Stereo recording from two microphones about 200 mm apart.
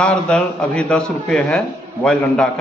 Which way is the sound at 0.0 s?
5° left (ahead or behind).